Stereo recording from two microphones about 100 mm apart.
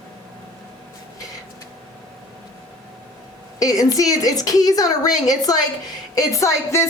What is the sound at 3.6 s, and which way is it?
A woman's voice, 35° left (ahead or behind).